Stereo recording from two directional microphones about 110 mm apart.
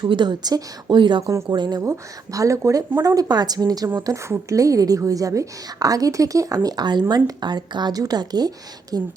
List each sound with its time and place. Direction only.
0.0 s a woman's voice: 45° right (ahead or behind)
1.8 s a woman's voice: 30° right (ahead or behind)